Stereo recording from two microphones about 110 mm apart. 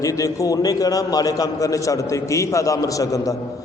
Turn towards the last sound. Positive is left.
turn(degrees=30)  # may be behind; listen again after turning